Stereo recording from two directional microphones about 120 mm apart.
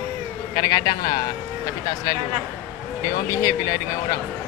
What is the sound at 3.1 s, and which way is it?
Speech, 30° left (ahead or behind).